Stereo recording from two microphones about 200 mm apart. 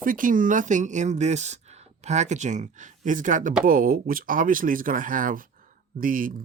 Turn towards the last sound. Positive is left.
turn(degrees=-45)  # may be behind; listen again after turning